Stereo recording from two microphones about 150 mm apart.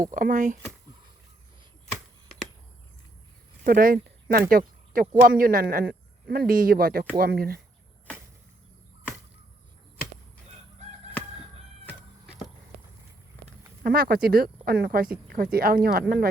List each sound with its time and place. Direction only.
0.1 s speech: 60° right (ahead or behind)
3.6 s speech: 70° right (ahead or behind)
6.2 s speech: 90° right
13.8 s speech: 85° right